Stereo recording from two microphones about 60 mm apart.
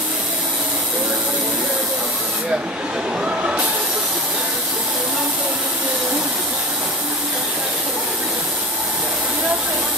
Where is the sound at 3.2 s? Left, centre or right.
Right.